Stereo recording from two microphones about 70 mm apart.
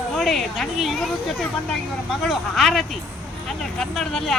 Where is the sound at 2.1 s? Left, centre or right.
Centre.